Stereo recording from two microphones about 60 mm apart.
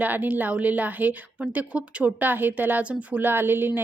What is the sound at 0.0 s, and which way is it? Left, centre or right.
A woman's voice, right.